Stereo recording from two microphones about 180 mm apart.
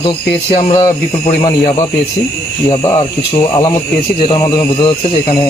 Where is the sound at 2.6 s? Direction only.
30° left (ahead or behind).